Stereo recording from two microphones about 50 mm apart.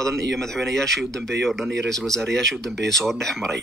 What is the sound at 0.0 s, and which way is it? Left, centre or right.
Speech, centre.